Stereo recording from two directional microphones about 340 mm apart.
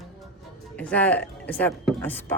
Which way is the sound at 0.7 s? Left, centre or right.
Centre.